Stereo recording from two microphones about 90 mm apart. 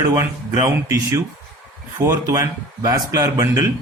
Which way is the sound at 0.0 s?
35° right (ahead or behind).